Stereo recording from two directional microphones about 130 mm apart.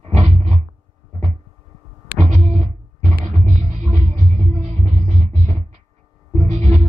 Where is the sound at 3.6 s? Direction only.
55° right (ahead or behind).